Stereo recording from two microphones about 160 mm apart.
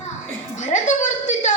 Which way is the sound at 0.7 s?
50° left (ahead or behind).